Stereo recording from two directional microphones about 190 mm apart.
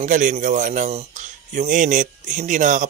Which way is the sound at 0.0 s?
40° right (ahead or behind).